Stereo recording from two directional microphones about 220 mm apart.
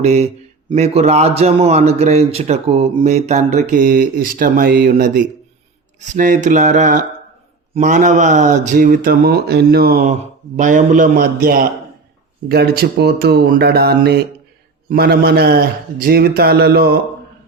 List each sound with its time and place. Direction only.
0.0 s a man's voice: 30° right (ahead or behind); by 17.0 s 45° right (ahead or behind)